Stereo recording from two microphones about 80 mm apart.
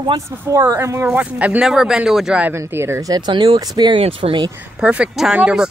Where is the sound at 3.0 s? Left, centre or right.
Right.